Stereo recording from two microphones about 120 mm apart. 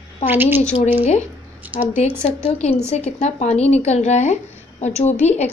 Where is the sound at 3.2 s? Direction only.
70° left (ahead or behind).